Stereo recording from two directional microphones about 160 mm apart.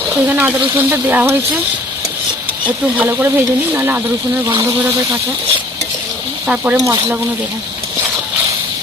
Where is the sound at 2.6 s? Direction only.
10° right (ahead or behind).